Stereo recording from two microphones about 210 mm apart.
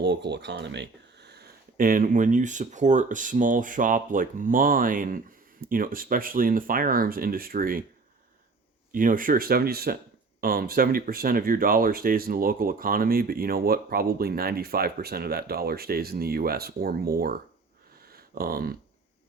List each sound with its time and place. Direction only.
0.0 s speech: 55° right (ahead or behind)
8.9 s speech: 40° right (ahead or behind)